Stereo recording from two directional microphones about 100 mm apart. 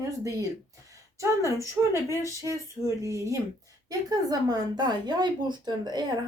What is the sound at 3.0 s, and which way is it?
A woman's voice, 30° right (ahead or behind).